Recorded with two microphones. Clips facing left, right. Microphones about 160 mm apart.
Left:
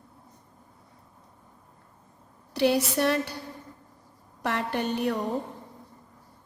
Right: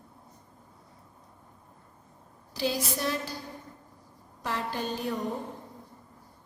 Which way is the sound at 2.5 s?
65° left (ahead or behind).